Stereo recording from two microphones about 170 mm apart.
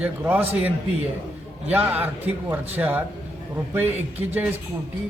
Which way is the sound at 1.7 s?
10° right (ahead or behind).